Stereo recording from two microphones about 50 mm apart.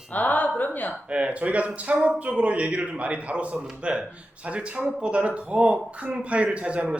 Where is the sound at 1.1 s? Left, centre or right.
Right.